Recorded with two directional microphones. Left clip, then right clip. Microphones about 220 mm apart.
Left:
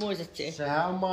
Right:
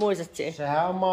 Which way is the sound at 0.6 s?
25° right (ahead or behind).